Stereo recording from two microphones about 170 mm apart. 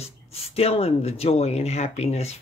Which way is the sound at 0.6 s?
35° left (ahead or behind).